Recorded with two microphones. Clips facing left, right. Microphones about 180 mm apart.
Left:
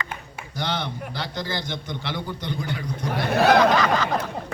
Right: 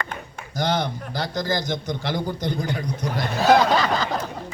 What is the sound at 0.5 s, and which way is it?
A man's voice, 45° right (ahead or behind).